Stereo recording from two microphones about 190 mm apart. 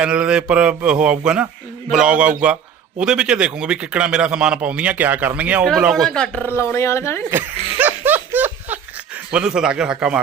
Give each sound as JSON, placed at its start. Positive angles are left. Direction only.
{"t": 0.0, "sound": "a man's voice", "side_deg": -5}
{"t": 7.3, "sound": "speech", "side_deg": -10}
{"t": 7.8, "sound": "laughter", "side_deg": -10}
{"t": 9.3, "sound": "a man's voice", "side_deg": -5}